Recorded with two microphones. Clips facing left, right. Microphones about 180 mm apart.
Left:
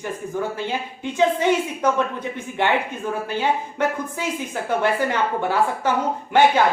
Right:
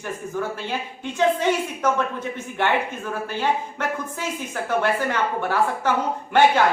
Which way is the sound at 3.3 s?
15° left (ahead or behind).